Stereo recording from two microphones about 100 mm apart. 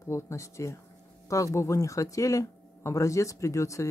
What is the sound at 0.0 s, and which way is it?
Speech, 30° left (ahead or behind).